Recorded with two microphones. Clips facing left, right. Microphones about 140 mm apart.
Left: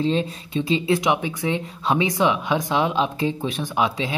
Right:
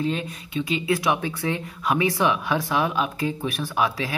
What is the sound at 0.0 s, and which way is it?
Speech, 30° left (ahead or behind).